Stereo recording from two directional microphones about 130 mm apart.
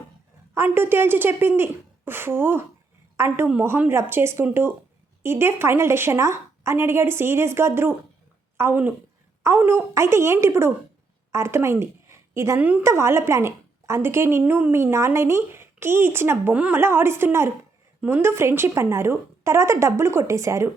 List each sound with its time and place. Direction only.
0.5 s a woman's voice: 15° right (ahead or behind)
12.5 s a woman's voice: 10° right (ahead or behind)